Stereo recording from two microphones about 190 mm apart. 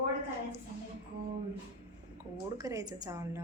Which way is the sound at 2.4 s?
15° right (ahead or behind).